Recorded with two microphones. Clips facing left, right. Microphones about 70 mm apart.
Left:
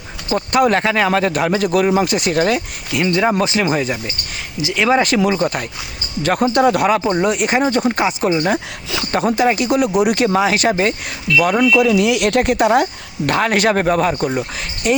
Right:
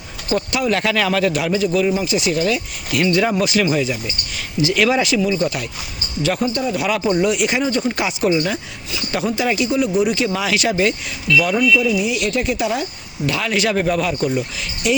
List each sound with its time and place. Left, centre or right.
0.3 s speech: left
3.1 s speech: left
3.7 s speech: left
4.6 s speech: left
4.9 s speech: left
6.5 s speech: left
7.1 s speech: left
7.9 s speech: left
9.6 s speech: left
10.3 s speech: left
11.8 s speech: left